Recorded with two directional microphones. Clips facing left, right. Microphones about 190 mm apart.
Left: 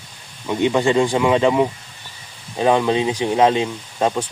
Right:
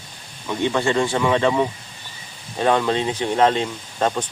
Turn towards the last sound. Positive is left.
turn(degrees=10)  # may be behind; listen again after turning